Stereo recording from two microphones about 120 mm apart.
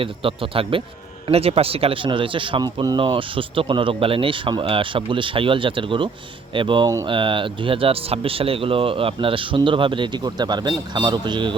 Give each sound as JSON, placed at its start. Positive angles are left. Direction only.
{"t": 0.0, "sound": "speech", "side_deg": -50}